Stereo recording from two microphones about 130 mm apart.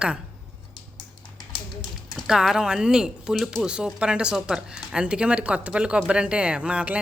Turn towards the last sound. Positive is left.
turn(degrees=-10)  # may be behind; listen again after turning